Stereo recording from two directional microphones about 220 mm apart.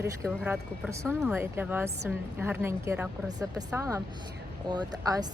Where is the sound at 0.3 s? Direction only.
5° right (ahead or behind).